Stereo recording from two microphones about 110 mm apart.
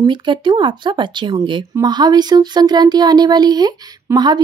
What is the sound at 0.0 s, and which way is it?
Speech, 45° right (ahead or behind).